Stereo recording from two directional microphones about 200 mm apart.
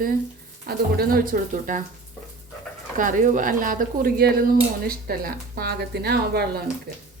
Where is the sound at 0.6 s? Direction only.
50° right (ahead or behind).